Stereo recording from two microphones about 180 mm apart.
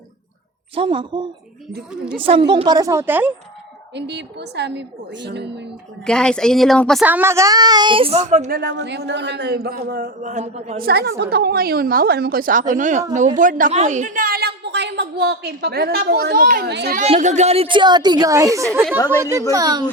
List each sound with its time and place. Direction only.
0.8 s speech: 25° right (ahead or behind); by 3.3 s 10° right (ahead or behind)
3.9 s speech: 70° right (ahead or behind)
6.1 s speech: 5° left (ahead or behind)
7.0 s speech: 10° right (ahead or behind); by 8.4 s 40° right (ahead or behind)
8.4 s speech: 65° right (ahead or behind)
10.2 s a woman's voice: 40° right (ahead or behind)
10.8 s a woman's voice: 60° right (ahead or behind)
17.0 s a woman's voice: 40° right (ahead or behind); by 19.8 s 20° right (ahead or behind)